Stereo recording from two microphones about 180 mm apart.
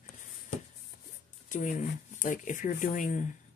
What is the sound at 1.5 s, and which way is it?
Speech, 45° left (ahead or behind).